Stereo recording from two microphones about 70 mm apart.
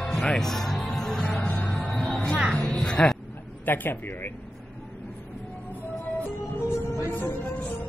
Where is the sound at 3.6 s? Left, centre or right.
Left.